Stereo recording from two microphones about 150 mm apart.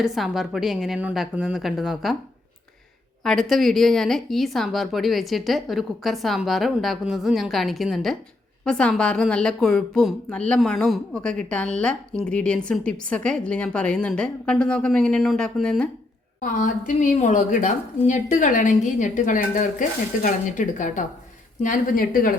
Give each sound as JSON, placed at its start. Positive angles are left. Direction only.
{"t": 0.0, "sound": "speech", "side_deg": 0}
{"t": 3.2, "sound": "a woman's voice", "side_deg": 0}
{"t": 16.4, "sound": "a woman's voice", "side_deg": 65}